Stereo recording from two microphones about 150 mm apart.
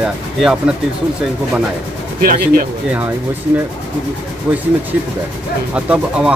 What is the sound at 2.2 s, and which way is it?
Speech, 80° right.